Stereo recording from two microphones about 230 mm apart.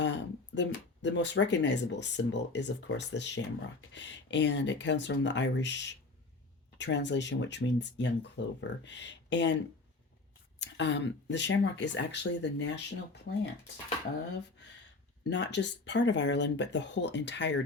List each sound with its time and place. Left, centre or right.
0.0 s speech: left
10.6 s speech: left
15.3 s speech: left